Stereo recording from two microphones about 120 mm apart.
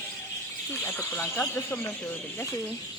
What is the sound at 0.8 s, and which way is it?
Speech, 20° left (ahead or behind).